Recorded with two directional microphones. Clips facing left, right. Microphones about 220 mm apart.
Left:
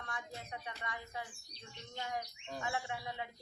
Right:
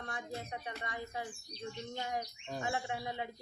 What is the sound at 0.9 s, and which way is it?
Speech, 35° right (ahead or behind).